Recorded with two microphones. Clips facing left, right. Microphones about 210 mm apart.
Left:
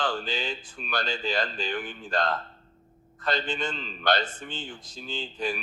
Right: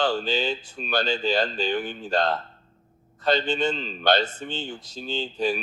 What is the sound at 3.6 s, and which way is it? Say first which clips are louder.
Speech: right 7 dB; 25° right (ahead or behind).